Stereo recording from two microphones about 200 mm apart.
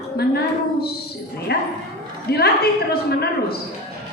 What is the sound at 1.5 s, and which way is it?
A woman's voice, 55° left (ahead or behind).